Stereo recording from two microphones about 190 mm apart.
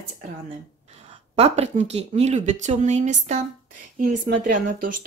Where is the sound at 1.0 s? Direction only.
35° right (ahead or behind).